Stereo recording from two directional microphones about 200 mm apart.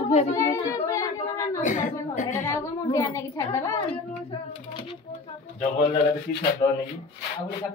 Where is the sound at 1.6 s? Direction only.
40° left (ahead or behind).